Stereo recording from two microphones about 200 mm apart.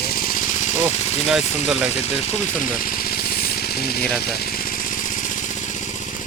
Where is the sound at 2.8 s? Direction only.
45° left (ahead or behind).